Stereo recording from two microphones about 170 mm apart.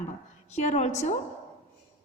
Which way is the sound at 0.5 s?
45° left (ahead or behind).